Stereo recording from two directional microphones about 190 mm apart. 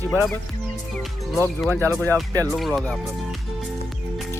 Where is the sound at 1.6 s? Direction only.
10° left (ahead or behind).